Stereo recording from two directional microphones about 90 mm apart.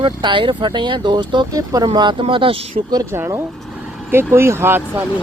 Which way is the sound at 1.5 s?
45° right (ahead or behind).